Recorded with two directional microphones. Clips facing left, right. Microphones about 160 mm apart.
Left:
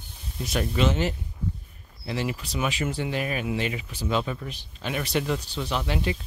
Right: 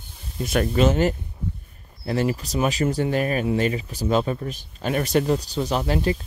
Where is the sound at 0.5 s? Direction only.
50° right (ahead or behind).